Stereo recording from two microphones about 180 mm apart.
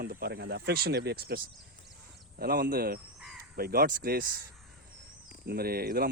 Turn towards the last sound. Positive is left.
turn(degrees=-60)  # may be behind; listen again after turning